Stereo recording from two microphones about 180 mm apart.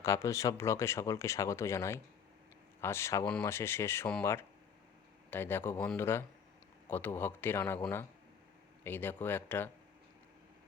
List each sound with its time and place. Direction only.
0.0 s speech: 15° left (ahead or behind)
8.8 s speech: 10° left (ahead or behind)